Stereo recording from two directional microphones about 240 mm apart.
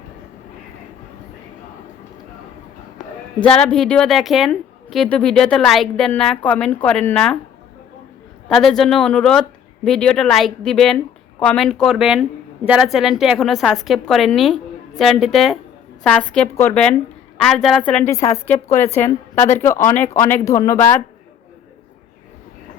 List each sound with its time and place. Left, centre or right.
3.4 s a woman's voice: centre
8.4 s a woman's voice: centre
19.0 s a woman's voice: left
19.5 s a woman's voice: centre